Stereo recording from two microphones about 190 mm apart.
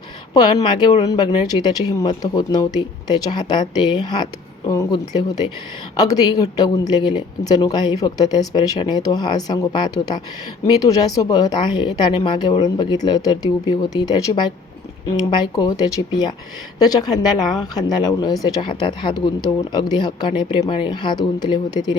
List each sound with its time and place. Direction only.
0.3 s a woman's voice: 20° left (ahead or behind)